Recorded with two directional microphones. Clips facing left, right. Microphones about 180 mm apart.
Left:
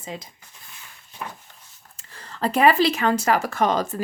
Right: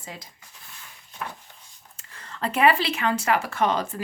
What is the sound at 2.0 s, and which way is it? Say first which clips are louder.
A woman's voice: left 4 dB; 35° left (ahead or behind).